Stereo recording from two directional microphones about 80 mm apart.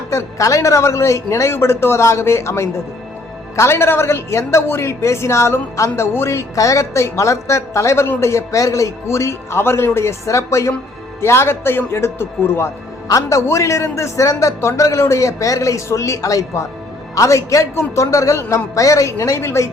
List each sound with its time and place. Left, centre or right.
0.1 s a woman's voice: left
13.1 s a woman's voice: left